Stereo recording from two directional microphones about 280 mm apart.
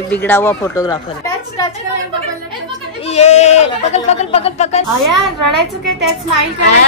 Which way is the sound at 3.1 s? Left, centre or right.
Left.